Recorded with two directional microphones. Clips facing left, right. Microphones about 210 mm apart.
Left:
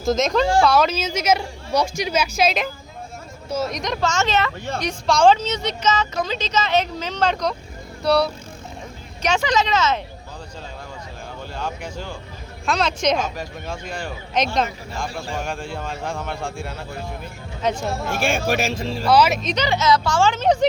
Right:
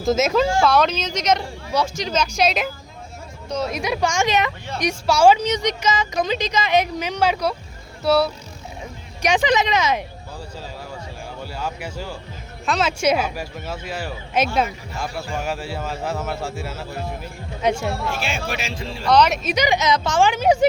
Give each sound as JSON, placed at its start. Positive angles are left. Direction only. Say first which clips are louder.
{"t": 0.0, "sound": "speech", "louder": "right 1 dB", "side_deg": -5}
{"t": 9.2, "sound": "speech", "louder": "right 2 dB", "side_deg": -15}
{"t": 11.5, "sound": "speech", "louder": "even", "side_deg": -5}
{"t": 18.1, "sound": "speech", "louder": "left 5 dB", "side_deg": 50}
{"t": 19.0, "sound": "speech", "louder": "even", "side_deg": 5}